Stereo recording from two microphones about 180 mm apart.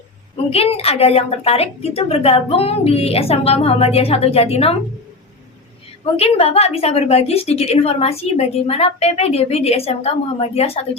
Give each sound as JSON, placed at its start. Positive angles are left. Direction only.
{"t": 0.5, "sound": "a woman's voice", "side_deg": 35}
{"t": 6.1, "sound": "a woman's voice", "side_deg": 35}